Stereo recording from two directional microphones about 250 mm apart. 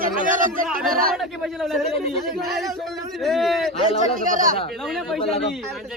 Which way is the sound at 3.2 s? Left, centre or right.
Centre.